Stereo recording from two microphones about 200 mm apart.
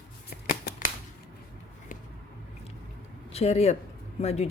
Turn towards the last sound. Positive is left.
turn(degrees=30)  # may be behind; listen again after turning